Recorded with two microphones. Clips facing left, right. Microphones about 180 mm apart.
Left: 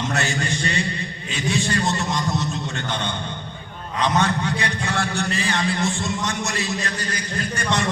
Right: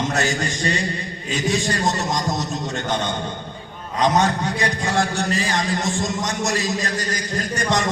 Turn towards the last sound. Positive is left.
turn(degrees=-40)  # may be behind; listen again after turning